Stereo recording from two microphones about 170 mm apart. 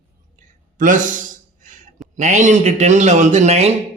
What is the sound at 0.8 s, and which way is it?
Speech, 50° right (ahead or behind).